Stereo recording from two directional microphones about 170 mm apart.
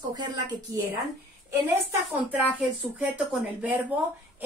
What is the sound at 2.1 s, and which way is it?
Speech, 10° right (ahead or behind).